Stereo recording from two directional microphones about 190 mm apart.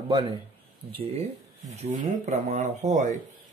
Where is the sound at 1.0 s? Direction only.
30° right (ahead or behind).